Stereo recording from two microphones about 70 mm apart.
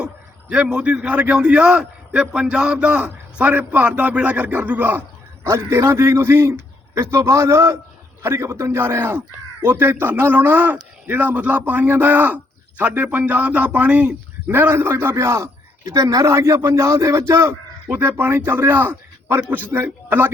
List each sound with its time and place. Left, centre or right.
0.0 s a sound: centre
1.0 s a man's voice: right
5.4 s a man's voice: right
14.5 s a man's voice: right
15.8 s speech: right
16.2 s a man's voice: right